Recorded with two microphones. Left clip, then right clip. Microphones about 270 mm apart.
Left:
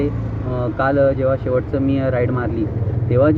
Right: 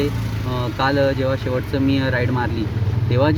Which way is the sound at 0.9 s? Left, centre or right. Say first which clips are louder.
Left 3 dB; right.